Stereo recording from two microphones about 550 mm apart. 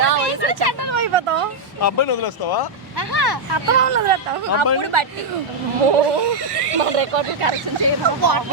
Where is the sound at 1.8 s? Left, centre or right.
Left.